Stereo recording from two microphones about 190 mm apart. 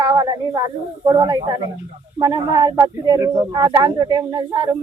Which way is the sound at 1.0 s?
20° right (ahead or behind).